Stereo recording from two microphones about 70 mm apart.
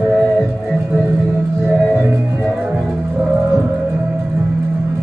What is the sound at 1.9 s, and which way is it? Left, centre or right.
Music, right.